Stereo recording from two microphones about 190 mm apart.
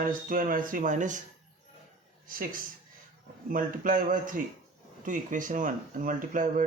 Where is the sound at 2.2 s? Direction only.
45° right (ahead or behind).